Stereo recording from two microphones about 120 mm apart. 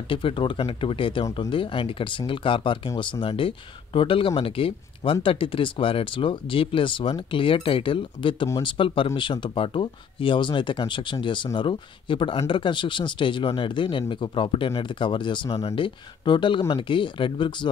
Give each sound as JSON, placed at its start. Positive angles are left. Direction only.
{"t": 0.1, "sound": "speech", "side_deg": 45}